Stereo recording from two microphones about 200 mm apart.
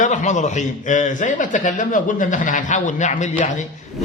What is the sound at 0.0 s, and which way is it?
A man's voice, 35° left (ahead or behind).